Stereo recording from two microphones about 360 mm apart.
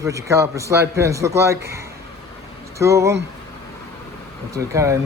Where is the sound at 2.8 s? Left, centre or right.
Centre.